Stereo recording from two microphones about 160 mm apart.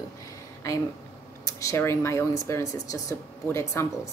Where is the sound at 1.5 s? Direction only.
20° left (ahead or behind).